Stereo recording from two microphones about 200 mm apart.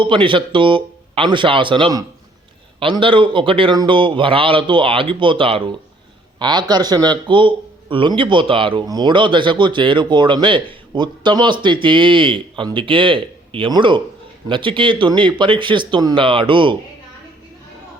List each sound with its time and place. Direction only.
0.0 s a man's voice: 25° right (ahead or behind)